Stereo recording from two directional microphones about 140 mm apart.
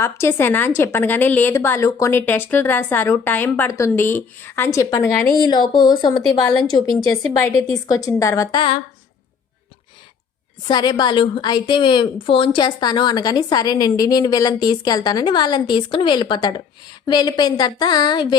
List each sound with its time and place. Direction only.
0.0 s a woman's voice: 15° left (ahead or behind)
7.3 s a woman's voice: 20° left (ahead or behind)
10.7 s a woman's voice: 30° left (ahead or behind)